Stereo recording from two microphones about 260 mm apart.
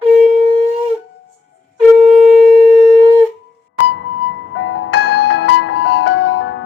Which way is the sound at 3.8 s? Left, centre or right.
Left.